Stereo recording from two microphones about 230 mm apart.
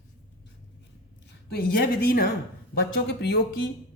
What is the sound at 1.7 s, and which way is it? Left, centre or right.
A woman's voice, left.